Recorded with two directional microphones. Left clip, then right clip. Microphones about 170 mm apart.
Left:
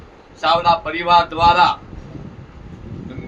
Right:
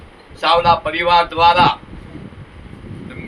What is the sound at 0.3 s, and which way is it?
A man's voice, centre (ahead or behind).